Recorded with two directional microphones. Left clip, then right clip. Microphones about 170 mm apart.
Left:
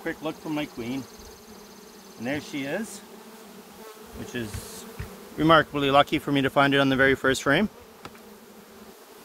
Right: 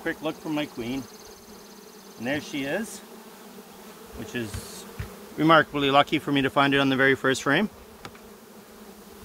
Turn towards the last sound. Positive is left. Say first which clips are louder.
# left 1 dB
turn(degrees=35)  # may be behind; listen again after turning